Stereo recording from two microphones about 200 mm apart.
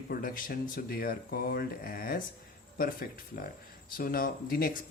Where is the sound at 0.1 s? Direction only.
45° left (ahead or behind).